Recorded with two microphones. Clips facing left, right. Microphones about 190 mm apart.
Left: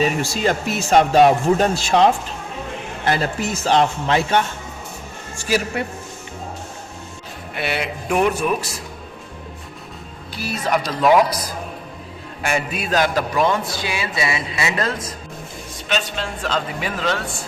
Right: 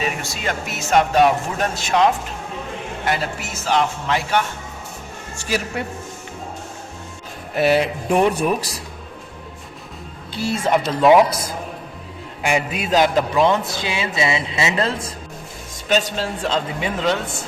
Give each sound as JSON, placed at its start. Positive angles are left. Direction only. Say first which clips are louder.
{"t": 0.0, "sound": "speech", "louder": "left 6 dB", "side_deg": 30}
{"t": 5.4, "sound": "speech", "louder": "left 3 dB", "side_deg": 5}
{"t": 7.5, "sound": "speech", "louder": "right 8 dB", "side_deg": -35}
{"t": 10.3, "sound": "a man's voice", "louder": "right 3 dB", "side_deg": -25}
{"t": 12.4, "sound": "a man's voice", "louder": "right 2 dB", "side_deg": -15}
{"t": 15.9, "sound": "speech", "louder": "right 4 dB", "side_deg": -40}
{"t": 16.5, "sound": "a man's voice", "louder": "left 1 dB", "side_deg": -20}